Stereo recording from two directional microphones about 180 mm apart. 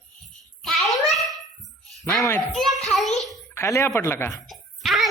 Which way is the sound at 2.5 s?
Centre (ahead or behind).